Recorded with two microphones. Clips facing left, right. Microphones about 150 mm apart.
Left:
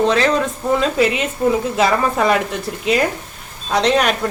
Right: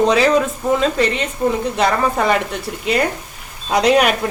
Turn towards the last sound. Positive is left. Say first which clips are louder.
# right 2 dB
turn(degrees=-10)  # may be behind; listen again after turning